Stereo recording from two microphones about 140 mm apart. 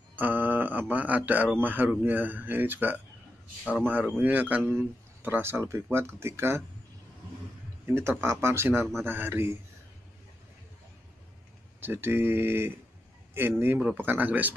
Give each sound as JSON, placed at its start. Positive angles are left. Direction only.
{"t": 0.1, "sound": "speech", "side_deg": -15}
{"t": 7.8, "sound": "speech", "side_deg": -15}
{"t": 11.8, "sound": "speech", "side_deg": -15}